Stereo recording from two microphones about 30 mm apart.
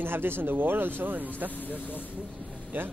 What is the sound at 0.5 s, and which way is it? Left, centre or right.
Speech, right.